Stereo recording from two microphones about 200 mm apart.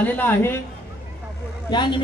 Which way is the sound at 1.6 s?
20° left (ahead or behind).